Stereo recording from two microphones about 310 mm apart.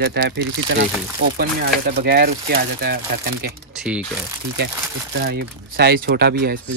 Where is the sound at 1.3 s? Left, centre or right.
Right.